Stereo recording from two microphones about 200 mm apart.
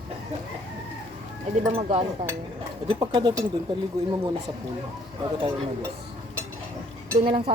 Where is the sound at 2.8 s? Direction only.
25° right (ahead or behind).